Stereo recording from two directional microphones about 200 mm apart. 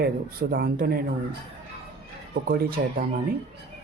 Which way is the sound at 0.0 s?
50° right (ahead or behind).